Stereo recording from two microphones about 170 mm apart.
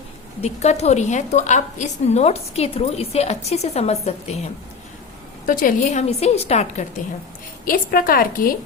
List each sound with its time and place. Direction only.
0.4 s a woman's voice: 40° left (ahead or behind)
5.5 s a woman's voice: 55° left (ahead or behind)
7.6 s a woman's voice: 60° left (ahead or behind)